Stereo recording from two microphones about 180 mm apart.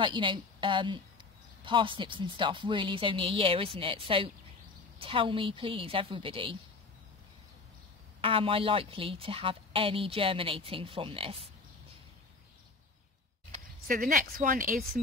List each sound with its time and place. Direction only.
0.0 s speech: 25° right (ahead or behind)
8.2 s a woman's voice: 30° right (ahead or behind)
13.8 s a woman's voice: 55° right (ahead or behind)